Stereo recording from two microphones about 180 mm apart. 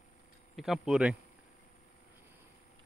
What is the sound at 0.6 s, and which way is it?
Speech, centre (ahead or behind).